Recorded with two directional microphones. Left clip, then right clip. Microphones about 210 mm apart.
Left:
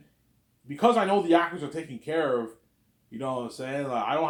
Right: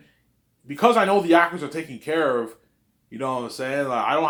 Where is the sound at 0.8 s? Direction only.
25° right (ahead or behind).